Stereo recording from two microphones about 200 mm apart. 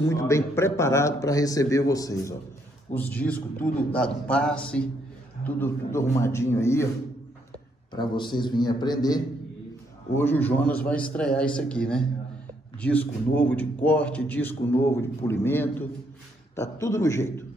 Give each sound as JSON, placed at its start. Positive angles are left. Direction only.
{"t": 0.0, "sound": "a man's voice", "side_deg": 15}
{"t": 7.9, "sound": "a man's voice", "side_deg": 20}